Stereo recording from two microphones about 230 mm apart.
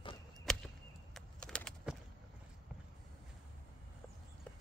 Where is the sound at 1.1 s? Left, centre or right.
Centre.